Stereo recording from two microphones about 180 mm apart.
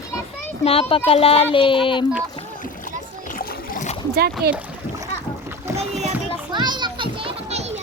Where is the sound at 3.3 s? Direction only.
55° left (ahead or behind).